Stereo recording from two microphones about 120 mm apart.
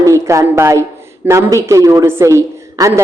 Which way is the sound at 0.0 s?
25° right (ahead or behind).